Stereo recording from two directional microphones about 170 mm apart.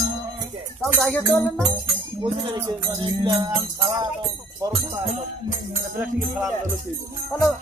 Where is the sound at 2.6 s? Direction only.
25° right (ahead or behind).